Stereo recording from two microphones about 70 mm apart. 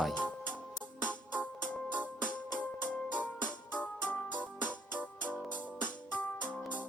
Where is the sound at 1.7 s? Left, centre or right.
Centre.